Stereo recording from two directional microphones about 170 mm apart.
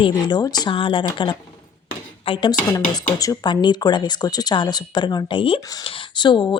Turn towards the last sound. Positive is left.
turn(degrees=25)  # may be behind; listen again after turning